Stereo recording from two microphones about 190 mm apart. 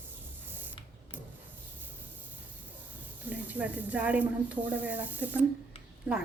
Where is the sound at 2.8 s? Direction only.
10° right (ahead or behind).